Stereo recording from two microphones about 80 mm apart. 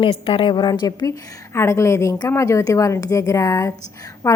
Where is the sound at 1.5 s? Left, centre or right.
Left.